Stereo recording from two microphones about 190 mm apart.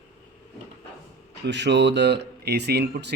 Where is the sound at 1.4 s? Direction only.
65° right (ahead or behind).